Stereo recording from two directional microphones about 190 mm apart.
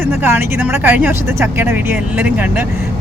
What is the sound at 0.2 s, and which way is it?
Speech, 10° right (ahead or behind).